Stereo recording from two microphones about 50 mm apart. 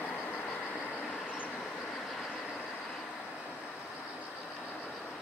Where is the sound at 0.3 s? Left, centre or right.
Left.